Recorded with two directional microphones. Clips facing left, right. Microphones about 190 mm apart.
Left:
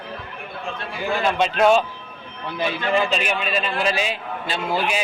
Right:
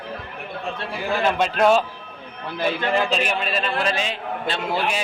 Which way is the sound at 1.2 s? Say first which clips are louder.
Left 1 dB; 5° right (ahead or behind).